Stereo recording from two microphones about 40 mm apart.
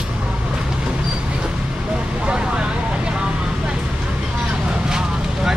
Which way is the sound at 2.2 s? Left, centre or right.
Right.